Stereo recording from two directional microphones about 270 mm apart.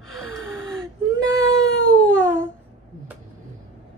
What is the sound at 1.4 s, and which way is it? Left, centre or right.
Cat, left.